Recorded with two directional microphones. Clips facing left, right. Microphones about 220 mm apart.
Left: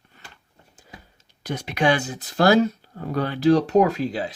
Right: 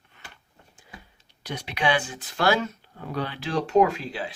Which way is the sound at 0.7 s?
45° left (ahead or behind).